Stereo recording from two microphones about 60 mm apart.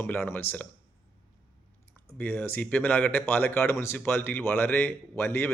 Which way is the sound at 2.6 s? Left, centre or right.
Left.